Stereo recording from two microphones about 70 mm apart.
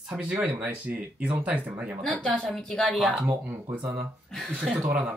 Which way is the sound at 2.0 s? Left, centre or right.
Centre.